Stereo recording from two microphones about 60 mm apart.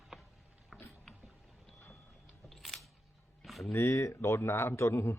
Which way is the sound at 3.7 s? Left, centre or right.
Left.